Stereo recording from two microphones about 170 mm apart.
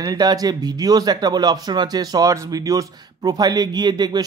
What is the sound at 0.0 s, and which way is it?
A man's voice, 20° right (ahead or behind).